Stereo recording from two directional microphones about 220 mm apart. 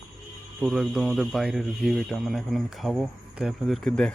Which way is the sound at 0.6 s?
Centre (ahead or behind).